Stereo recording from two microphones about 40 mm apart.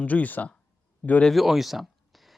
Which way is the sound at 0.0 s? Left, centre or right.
Left.